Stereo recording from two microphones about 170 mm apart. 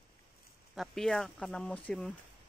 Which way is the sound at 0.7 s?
Centre (ahead or behind).